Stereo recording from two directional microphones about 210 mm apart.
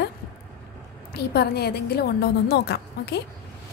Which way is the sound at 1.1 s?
50° left (ahead or behind).